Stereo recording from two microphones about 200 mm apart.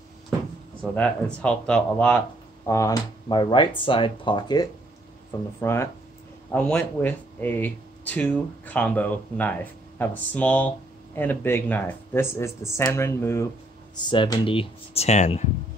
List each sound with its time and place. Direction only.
0.9 s speech: 5° left (ahead or behind); by 15.4 s 35° left (ahead or behind)